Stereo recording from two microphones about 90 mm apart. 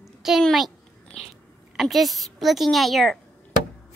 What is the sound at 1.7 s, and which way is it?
A woman's voice, centre (ahead or behind).